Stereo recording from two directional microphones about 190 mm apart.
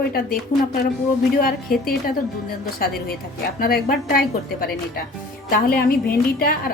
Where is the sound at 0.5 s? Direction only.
40° left (ahead or behind).